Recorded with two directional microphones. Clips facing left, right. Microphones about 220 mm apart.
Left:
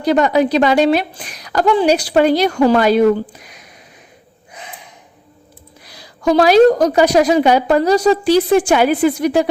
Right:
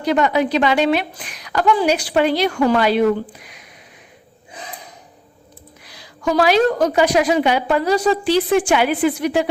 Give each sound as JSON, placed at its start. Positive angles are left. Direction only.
{"t": 0.0, "sound": "a woman's voice", "side_deg": 35}
{"t": 5.8, "sound": "a woman's voice", "side_deg": 35}